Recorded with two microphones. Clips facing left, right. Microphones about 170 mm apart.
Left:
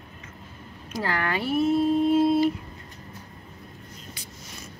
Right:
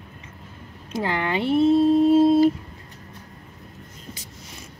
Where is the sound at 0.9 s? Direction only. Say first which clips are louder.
Right 3 dB; 20° right (ahead or behind); by 2.3 s 35° right (ahead or behind).